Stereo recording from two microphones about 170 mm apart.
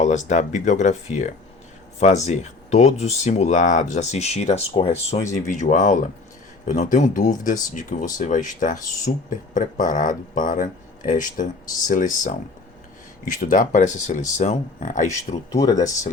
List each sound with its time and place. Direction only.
0.0 s speech: 45° left (ahead or behind)
5.3 s speech: 45° left (ahead or behind)
15.5 s speech: 20° left (ahead or behind)